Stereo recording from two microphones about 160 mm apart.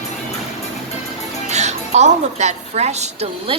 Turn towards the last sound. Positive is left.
turn(degrees=-40)  # may be behind; listen again after turning